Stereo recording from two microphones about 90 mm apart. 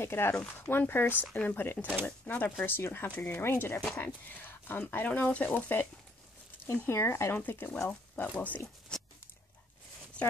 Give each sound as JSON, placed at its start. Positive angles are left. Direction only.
{"t": 0.0, "sound": "speech", "side_deg": 25}